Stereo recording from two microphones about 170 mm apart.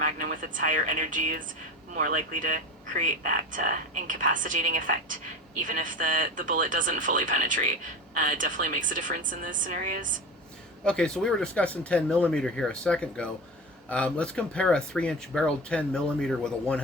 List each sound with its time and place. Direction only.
0.0 s speech: 50° right (ahead or behind)
10.8 s speech: 5° left (ahead or behind)